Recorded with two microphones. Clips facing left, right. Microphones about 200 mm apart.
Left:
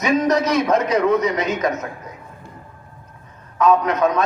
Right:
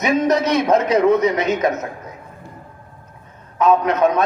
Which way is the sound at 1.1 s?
Centre (ahead or behind).